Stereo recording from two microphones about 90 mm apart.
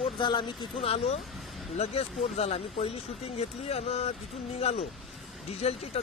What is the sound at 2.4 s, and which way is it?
Speech, 90° left.